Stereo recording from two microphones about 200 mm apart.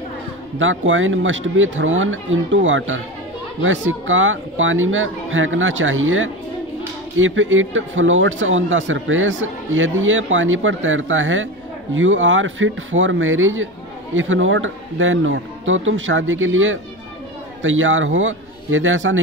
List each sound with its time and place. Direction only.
0.6 s a man's voice: 75° right (ahead or behind)